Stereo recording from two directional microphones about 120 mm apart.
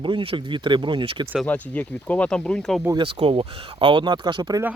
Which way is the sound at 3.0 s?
45° right (ahead or behind).